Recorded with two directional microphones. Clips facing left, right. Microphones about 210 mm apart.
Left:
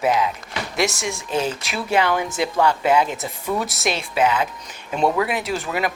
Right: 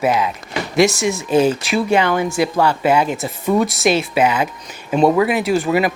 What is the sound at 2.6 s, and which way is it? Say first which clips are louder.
Speech: right 1 dB; 10° right (ahead or behind).